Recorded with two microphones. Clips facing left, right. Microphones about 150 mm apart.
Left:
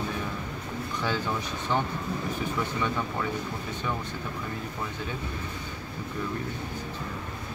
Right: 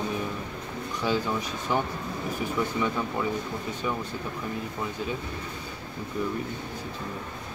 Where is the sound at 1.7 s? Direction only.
10° right (ahead or behind).